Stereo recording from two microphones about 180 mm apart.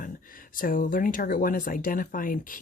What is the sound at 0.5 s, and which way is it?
Speech, 50° left (ahead or behind).